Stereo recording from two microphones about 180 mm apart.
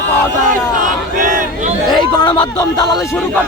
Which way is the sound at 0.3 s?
45° right (ahead or behind).